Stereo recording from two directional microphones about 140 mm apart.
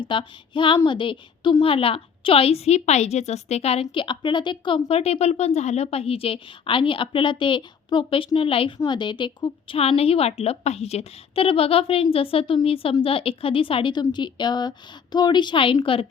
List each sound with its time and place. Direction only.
0.0 s a woman's voice: 35° left (ahead or behind)